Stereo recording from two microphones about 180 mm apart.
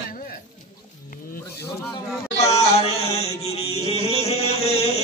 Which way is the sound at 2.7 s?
35° left (ahead or behind).